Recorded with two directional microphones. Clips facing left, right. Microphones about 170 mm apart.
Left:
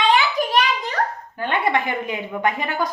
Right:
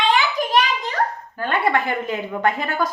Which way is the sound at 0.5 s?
45° left (ahead or behind).